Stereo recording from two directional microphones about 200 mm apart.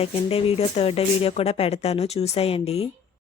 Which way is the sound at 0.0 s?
30° left (ahead or behind).